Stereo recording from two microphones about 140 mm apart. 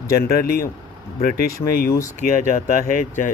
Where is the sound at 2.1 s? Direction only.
90° left.